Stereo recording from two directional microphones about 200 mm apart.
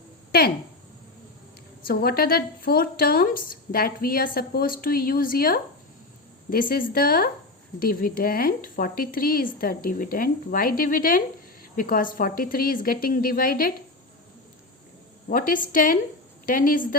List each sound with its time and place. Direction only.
0.3 s speech: 50° left (ahead or behind)
1.9 s a woman's voice: 50° left (ahead or behind)
15.3 s a woman's voice: 45° left (ahead or behind)